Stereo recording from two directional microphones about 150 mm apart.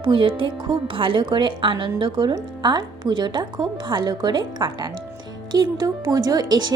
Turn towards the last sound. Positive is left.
turn(degrees=-25)  # may be behind; listen again after turning